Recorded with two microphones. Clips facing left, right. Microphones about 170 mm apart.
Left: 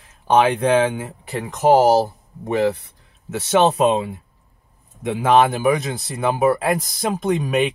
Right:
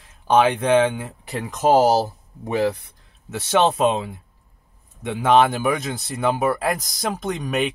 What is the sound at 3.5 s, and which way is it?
Speech, 5° left (ahead or behind).